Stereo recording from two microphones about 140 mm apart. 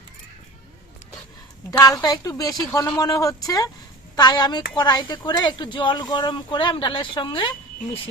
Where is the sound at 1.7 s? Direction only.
25° left (ahead or behind).